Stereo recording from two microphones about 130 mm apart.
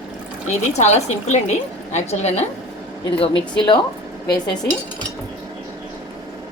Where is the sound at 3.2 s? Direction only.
40° left (ahead or behind).